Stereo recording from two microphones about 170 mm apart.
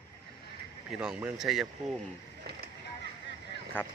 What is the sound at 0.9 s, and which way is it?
Speech, 5° right (ahead or behind).